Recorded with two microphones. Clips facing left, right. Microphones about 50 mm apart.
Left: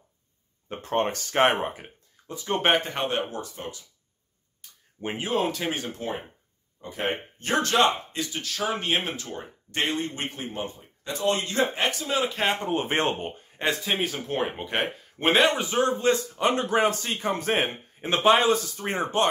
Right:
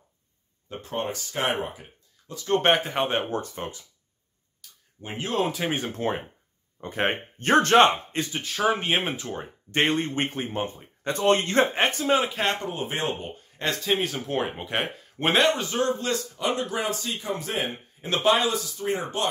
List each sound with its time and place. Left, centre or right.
0.7 s speech: left
2.2 s speech: left
2.6 s speech: centre
3.1 s speech: right
4.6 s a sound: left
5.2 s speech: centre
6.8 s speech: right
8.3 s speech: right
12.6 s a man's voice: left
13.6 s speech: centre
13.9 s speech: centre
15.5 s a man's voice: centre
16.3 s speech: left
18.0 s a man's voice: left